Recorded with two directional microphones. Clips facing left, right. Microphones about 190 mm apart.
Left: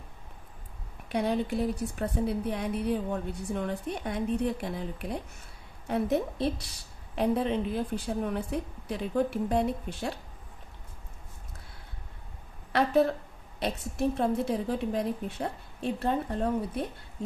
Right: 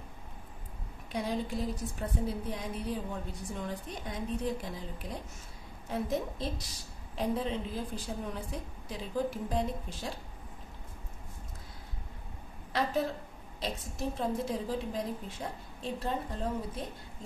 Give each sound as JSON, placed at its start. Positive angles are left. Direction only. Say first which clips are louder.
{"t": 1.0, "sound": "a woman's voice", "louder": "left 5 dB", "side_deg": 65}
{"t": 12.7, "sound": "a woman's voice", "louder": "left 7 dB", "side_deg": 65}